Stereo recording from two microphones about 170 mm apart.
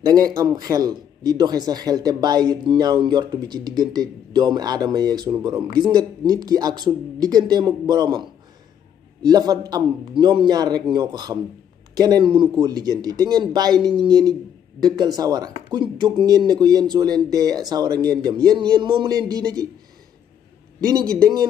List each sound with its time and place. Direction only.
0.0 s speech: 20° right (ahead or behind)
20.8 s speech: 20° right (ahead or behind)